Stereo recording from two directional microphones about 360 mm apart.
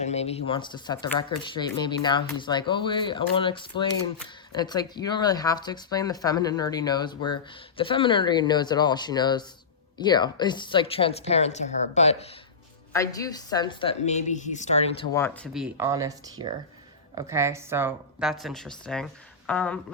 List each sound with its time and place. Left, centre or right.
0.0 s a woman's voice: centre